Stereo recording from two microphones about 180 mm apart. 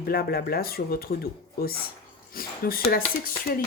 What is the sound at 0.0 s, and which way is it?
Speech, 60° left (ahead or behind).